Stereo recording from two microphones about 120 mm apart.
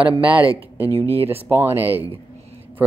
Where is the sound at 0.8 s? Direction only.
25° left (ahead or behind).